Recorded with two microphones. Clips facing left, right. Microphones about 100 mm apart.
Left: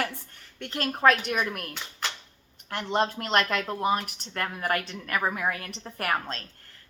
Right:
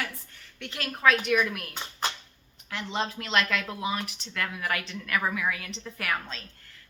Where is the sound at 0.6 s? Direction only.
40° left (ahead or behind).